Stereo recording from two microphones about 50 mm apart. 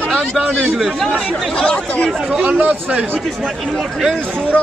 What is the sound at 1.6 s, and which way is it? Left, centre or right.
Speech, left.